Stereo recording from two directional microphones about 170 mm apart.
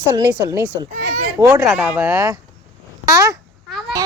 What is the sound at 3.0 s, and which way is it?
Speech, 20° right (ahead or behind).